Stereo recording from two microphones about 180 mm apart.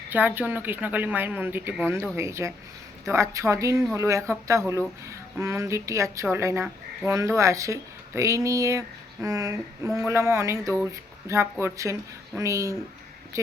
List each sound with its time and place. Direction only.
0.1 s speech: 10° right (ahead or behind)